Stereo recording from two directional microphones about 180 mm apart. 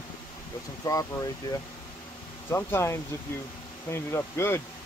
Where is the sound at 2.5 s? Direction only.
15° left (ahead or behind).